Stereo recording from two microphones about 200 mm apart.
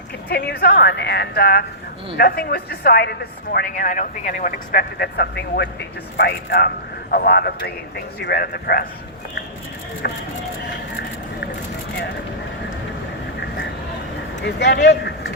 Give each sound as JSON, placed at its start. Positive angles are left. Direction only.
{"t": 0.3, "sound": "a woman's voice", "side_deg": 50}
{"t": 10.0, "sound": "a woman's voice", "side_deg": 55}
{"t": 14.4, "sound": "speech", "side_deg": 60}